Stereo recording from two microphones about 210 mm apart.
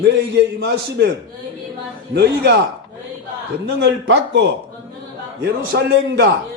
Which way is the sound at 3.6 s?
55° right (ahead or behind).